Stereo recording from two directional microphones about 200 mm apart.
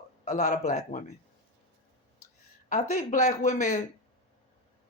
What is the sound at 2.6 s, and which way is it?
Speech, 40° left (ahead or behind).